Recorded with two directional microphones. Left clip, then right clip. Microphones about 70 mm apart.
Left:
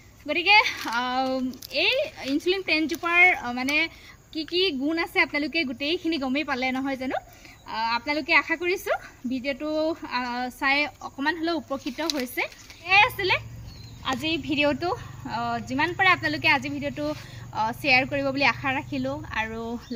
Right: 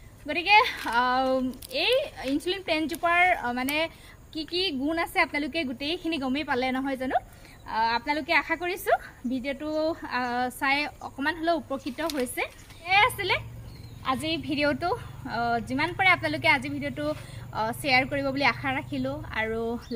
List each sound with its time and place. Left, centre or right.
0.3 s a woman's voice: right
11.7 s a woman's voice: centre
14.3 s a woman's voice: centre